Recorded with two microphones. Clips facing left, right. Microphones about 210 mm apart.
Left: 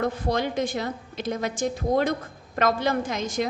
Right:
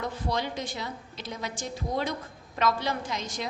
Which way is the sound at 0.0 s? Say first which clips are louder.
Left 6 dB; 50° left (ahead or behind).